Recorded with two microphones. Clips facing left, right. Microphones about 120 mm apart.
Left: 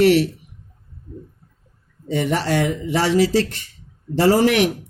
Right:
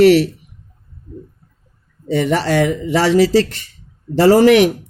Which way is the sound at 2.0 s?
90° right.